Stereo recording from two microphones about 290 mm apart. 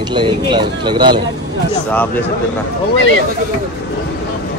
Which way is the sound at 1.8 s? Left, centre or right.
Centre.